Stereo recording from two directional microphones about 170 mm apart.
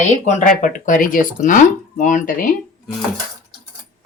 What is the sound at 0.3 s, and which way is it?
Speech, 45° left (ahead or behind).